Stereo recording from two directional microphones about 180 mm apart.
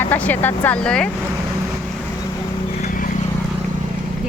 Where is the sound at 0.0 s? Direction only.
10° left (ahead or behind).